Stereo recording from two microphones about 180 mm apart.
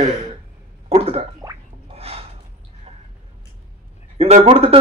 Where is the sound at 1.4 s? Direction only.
20° right (ahead or behind).